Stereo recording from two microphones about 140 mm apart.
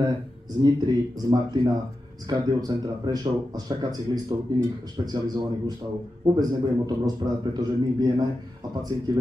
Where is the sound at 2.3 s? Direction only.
30° right (ahead or behind).